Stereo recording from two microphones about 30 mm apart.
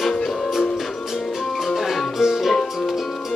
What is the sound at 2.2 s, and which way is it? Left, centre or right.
Music, centre.